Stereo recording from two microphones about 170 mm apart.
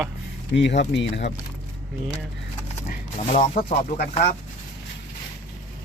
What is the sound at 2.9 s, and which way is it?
Speech, 50° left (ahead or behind).